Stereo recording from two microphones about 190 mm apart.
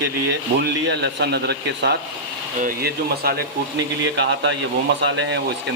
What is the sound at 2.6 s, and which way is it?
Speech, 50° right (ahead or behind).